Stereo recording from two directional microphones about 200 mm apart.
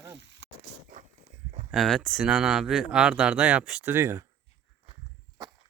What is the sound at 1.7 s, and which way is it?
Speech, centre (ahead or behind).